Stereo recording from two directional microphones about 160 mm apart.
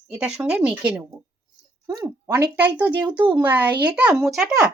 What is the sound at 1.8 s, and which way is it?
Speech, 20° right (ahead or behind).